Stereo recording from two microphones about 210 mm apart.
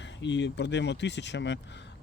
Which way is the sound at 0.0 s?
55° left (ahead or behind).